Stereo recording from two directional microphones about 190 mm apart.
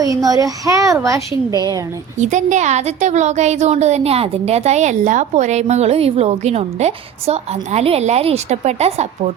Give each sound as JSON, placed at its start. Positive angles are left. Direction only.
{"t": 0.0, "sound": "a child's voice", "side_deg": -20}
{"t": 2.2, "sound": "a woman's voice", "side_deg": -40}